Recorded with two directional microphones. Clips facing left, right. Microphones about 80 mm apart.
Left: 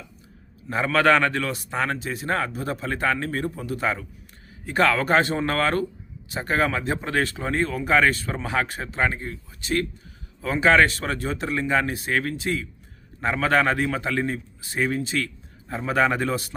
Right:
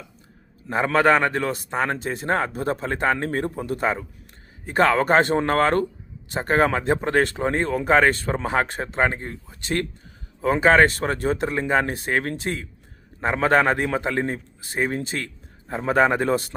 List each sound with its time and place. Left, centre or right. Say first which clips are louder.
0.9 s a man's voice: right 1 dB; right